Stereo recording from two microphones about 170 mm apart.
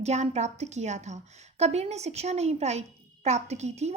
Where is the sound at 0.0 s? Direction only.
40° right (ahead or behind).